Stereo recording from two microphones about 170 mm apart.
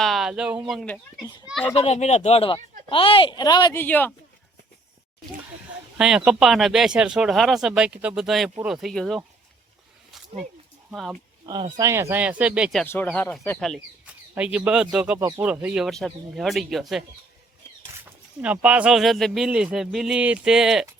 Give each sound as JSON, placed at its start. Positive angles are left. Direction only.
{"t": 0.0, "sound": "speech", "side_deg": 0}
{"t": 1.7, "sound": "speech", "side_deg": 40}
{"t": 3.8, "sound": "speech", "side_deg": 10}
{"t": 6.0, "sound": "speech", "side_deg": -5}
{"t": 10.9, "sound": "speech", "side_deg": 0}
{"t": 11.4, "sound": "speech", "side_deg": -25}
{"t": 12.8, "sound": "speech", "side_deg": 10}
{"t": 14.0, "sound": "speech", "side_deg": -5}
{"t": 18.4, "sound": "speech", "side_deg": -10}